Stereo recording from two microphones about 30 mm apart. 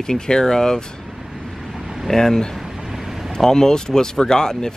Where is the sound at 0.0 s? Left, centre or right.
Left.